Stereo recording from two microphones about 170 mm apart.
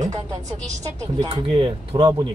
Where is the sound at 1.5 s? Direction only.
30° right (ahead or behind).